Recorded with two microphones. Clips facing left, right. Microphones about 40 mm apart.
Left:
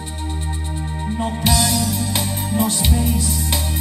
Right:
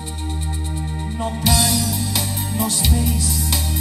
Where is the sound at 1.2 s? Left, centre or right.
Left.